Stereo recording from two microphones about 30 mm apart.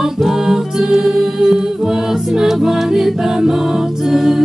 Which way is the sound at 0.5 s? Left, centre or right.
Centre.